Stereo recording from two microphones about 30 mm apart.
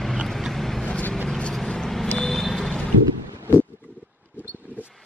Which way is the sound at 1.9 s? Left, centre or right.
Centre.